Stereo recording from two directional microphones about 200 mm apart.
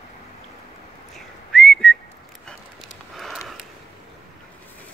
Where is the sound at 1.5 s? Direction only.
Centre (ahead or behind).